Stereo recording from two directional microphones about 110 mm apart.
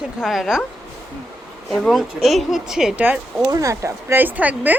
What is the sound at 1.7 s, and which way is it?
Speech, centre (ahead or behind).